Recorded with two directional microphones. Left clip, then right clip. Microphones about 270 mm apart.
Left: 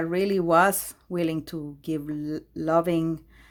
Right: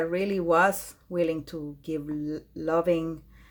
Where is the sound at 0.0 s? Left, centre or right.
Left.